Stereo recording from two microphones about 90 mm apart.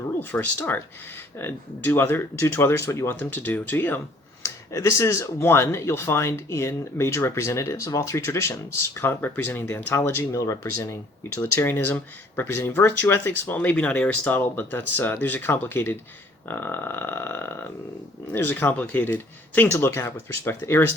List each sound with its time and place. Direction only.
0.2 s speech: 20° left (ahead or behind)
4.4 s speech: 35° left (ahead or behind)
10.4 s speech: 35° left (ahead or behind)
11.6 s speech: 20° left (ahead or behind)